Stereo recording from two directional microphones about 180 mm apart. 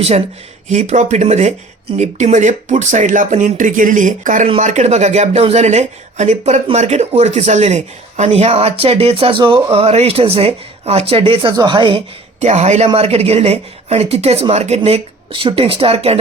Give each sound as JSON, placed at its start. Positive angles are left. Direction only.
{"t": 0.7, "sound": "speech", "side_deg": -40}
{"t": 12.4, "sound": "speech", "side_deg": -40}